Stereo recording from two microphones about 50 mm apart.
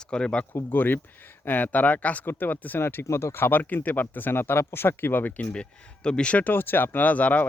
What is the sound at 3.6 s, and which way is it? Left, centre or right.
Speech, left.